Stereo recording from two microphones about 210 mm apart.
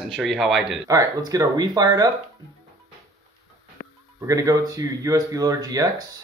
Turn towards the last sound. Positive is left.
turn(degrees=-15)  # may be behind; listen again after turning